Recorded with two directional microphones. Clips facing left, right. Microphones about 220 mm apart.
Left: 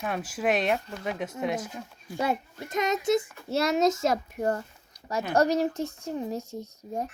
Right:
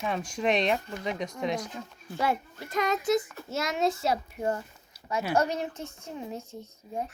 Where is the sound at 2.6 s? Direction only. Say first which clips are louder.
Left 1 dB; 20° left (ahead or behind).